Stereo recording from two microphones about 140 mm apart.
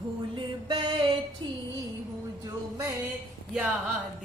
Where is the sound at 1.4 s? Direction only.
30° right (ahead or behind).